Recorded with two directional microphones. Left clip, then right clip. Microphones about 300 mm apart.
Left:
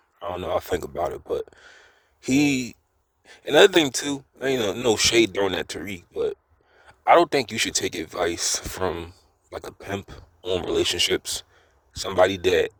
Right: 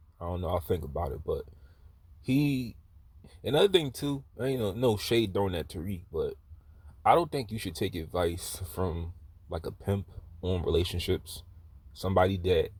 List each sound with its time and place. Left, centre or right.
0.3 s speech: left